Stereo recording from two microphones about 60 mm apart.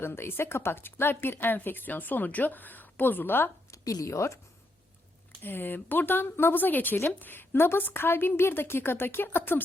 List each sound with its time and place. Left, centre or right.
0.0 s speech: left
3.7 s a woman's voice: left
5.4 s speech: left